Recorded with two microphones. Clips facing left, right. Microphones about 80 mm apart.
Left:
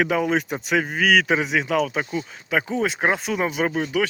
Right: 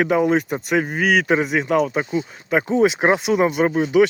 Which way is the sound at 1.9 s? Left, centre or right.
Centre.